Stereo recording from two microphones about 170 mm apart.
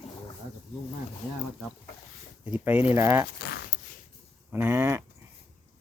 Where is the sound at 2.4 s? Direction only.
10° right (ahead or behind).